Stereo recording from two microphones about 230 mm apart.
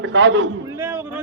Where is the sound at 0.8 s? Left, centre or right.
Centre.